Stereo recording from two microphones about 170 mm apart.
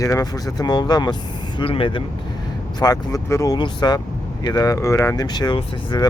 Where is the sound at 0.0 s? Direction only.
20° left (ahead or behind).